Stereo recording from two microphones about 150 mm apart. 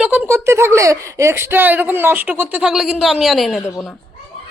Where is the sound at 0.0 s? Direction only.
10° right (ahead or behind).